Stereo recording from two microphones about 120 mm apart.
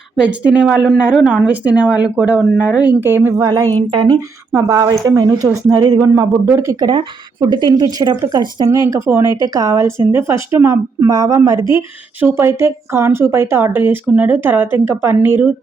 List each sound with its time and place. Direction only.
0.2 s speech: 10° right (ahead or behind)
3.3 s speech: 30° right (ahead or behind)
6.7 s speech: 40° right (ahead or behind); by 15.5 s 15° right (ahead or behind)